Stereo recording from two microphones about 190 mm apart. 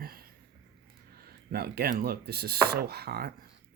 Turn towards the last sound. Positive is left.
turn(degrees=-55)  # may be behind; listen again after turning